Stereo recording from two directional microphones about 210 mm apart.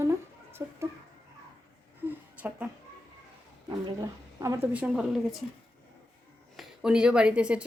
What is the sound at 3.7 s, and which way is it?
A woman's voice, 15° right (ahead or behind).